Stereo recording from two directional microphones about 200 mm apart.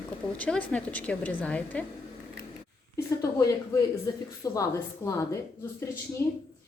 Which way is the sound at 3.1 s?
15° left (ahead or behind).